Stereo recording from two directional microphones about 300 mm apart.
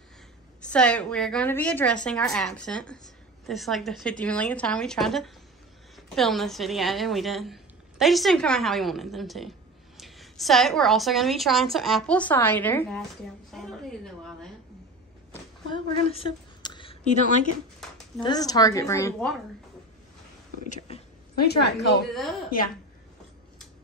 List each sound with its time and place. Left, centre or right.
0.7 s a woman's voice: centre
15.7 s a woman's voice: centre
17.7 s a sound: centre
18.2 s a woman's voice: centre
20.6 s speech: left
22.1 s a woman's voice: centre